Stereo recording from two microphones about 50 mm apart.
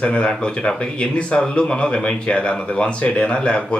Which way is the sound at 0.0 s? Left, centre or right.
Left.